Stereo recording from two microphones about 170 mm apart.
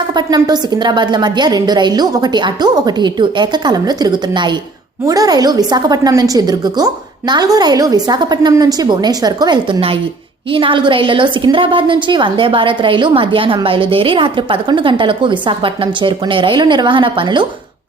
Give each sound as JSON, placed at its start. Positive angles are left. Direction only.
{"t": 0.1, "sound": "a woman's voice", "side_deg": -25}